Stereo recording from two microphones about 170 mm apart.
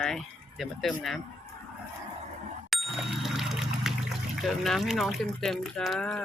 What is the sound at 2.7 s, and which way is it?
Speech, centre (ahead or behind).